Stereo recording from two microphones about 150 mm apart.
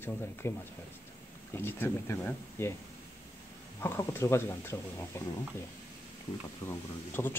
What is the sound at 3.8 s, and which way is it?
Speech, 15° left (ahead or behind).